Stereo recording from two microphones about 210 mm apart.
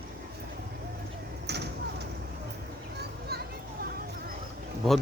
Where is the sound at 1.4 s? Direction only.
55° right (ahead or behind).